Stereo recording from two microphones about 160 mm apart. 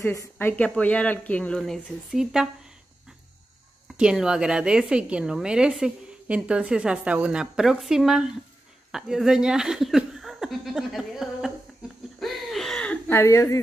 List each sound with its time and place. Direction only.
0.0 s a woman's voice: 15° left (ahead or behind); by 2.5 s 5° right (ahead or behind)
3.8 s a woman's voice: 5° right (ahead or behind)
8.9 s chuckle: 5° right (ahead or behind)
12.2 s a sound: centre (ahead or behind); by 13.6 s 15° left (ahead or behind)